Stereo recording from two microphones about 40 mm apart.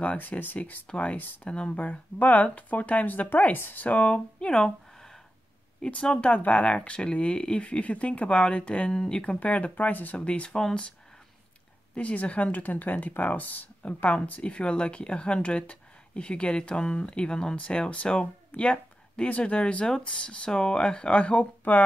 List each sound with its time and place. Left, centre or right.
0.3 s speech: left
4.4 s speech: left
4.6 s a sound: centre
5.8 s speech: left
8.9 s speech: centre
9.4 s speech: left
10.1 s speech: left
11.9 s speech: left